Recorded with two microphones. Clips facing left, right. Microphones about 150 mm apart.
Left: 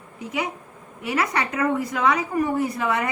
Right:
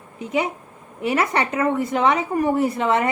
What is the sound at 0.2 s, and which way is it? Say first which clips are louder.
A woman's voice: right 5 dB; 25° right (ahead or behind).